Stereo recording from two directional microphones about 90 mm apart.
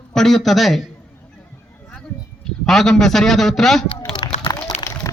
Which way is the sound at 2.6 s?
5° left (ahead or behind).